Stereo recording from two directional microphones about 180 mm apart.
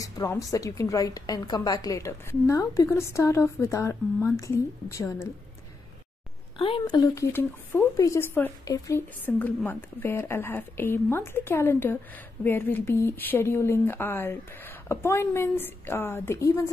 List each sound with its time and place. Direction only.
0.0 s a woman's voice: 15° left (ahead or behind)
6.8 s a woman's voice: 20° left (ahead or behind)